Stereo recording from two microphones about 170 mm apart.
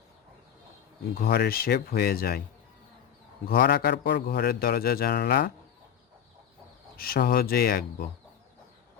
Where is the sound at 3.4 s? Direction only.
60° left (ahead or behind).